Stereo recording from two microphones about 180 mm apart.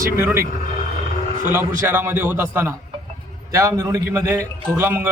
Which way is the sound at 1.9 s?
10° right (ahead or behind).